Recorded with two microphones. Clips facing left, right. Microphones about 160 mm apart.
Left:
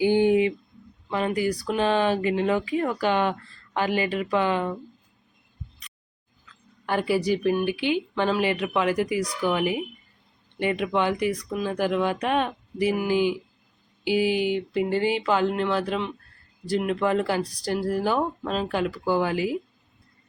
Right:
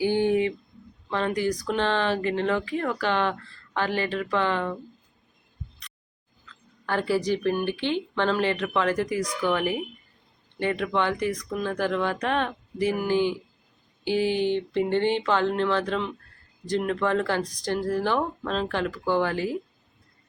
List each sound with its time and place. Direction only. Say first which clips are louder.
0.0 s a sound: left 3 dB; 15° left (ahead or behind)
1.1 s speech: left 1 dB; 10° left (ahead or behind)
6.8 s speech: left 1 dB; 15° left (ahead or behind)